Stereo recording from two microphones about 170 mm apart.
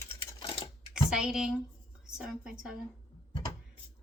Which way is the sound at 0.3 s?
35° left (ahead or behind).